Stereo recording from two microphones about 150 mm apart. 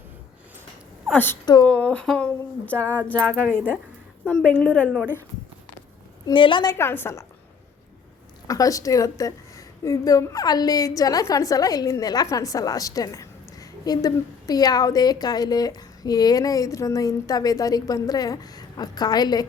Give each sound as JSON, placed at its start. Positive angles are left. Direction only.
{"t": 1.0, "sound": "a woman's voice", "side_deg": 10}
{"t": 6.2, "sound": "a woman's voice", "side_deg": 35}
{"t": 6.7, "sound": "speech", "side_deg": 15}
{"t": 8.4, "sound": "a woman's voice", "side_deg": 20}